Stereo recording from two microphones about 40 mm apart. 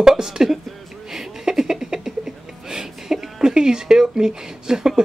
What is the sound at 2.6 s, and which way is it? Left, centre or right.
Speech, centre.